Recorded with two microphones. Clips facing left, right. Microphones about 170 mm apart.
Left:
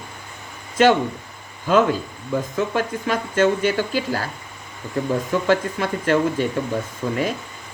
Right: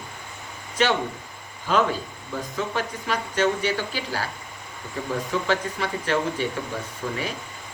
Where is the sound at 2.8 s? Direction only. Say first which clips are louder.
Left 5 dB; 50° left (ahead or behind).